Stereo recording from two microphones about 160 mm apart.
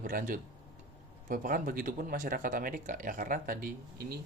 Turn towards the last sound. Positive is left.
turn(degrees=-70)  # may be behind; listen again after turning